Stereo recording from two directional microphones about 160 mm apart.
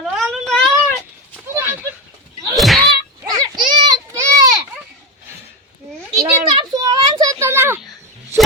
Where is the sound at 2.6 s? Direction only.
Centre (ahead or behind).